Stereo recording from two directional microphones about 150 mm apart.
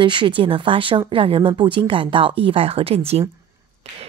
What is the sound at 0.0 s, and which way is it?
Speech, 35° right (ahead or behind).